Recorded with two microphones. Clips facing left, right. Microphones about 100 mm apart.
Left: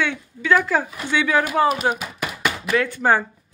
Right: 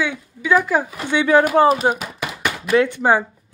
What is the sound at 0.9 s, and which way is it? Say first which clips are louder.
Speech: right 8 dB; 25° right (ahead or behind).